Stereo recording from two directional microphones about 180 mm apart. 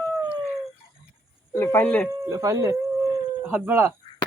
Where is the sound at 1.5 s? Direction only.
15° left (ahead or behind).